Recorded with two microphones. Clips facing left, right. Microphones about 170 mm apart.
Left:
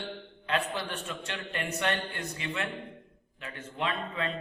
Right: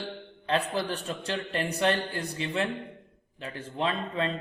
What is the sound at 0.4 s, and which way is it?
A man's voice, 35° right (ahead or behind).